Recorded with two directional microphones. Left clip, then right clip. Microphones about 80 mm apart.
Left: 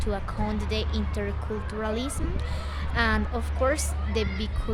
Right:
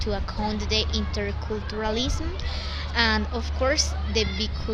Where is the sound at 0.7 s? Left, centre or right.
Left.